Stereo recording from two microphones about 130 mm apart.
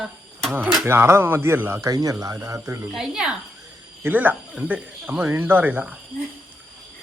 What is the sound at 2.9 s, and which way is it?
Speech, 5° right (ahead or behind).